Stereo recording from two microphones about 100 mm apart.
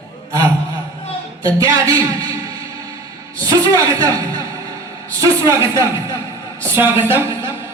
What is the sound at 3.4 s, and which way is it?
A man's voice, 35° right (ahead or behind).